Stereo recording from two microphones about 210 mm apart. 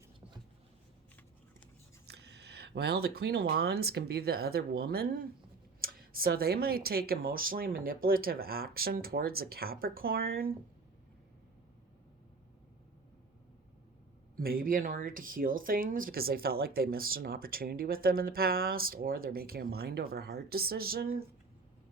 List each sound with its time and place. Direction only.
2.0 s a sound: 50° right (ahead or behind)
3.5 s speech: 50° right (ahead or behind)
14.3 s speech: 45° right (ahead or behind)